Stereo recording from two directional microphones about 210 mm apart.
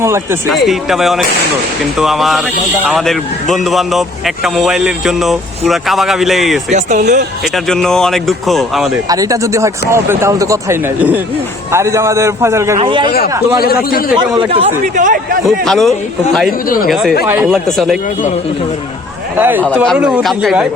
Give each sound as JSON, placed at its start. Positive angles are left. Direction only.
{"t": 0.0, "sound": "speech", "side_deg": -15}
{"t": 0.5, "sound": "a man's voice", "side_deg": 0}
{"t": 6.7, "sound": "speech", "side_deg": -35}
{"t": 7.4, "sound": "a man's voice", "side_deg": 0}
{"t": 9.0, "sound": "a man's voice", "side_deg": -15}
{"t": 13.1, "sound": "speech", "side_deg": 45}
{"t": 14.2, "sound": "a man's voice", "side_deg": -25}
{"t": 14.9, "sound": "speech", "side_deg": -40}
{"t": 15.4, "sound": "a man's voice", "side_deg": 0}
{"t": 16.5, "sound": "speech", "side_deg": 45}
{"t": 16.9, "sound": "a man's voice", "side_deg": 0}
{"t": 17.5, "sound": "a man's voice", "side_deg": 0}
{"t": 19.4, "sound": "a man's voice", "side_deg": -10}